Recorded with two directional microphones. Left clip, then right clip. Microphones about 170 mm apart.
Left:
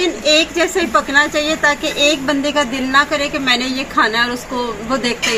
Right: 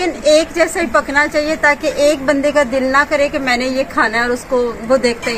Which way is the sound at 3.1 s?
45° right (ahead or behind).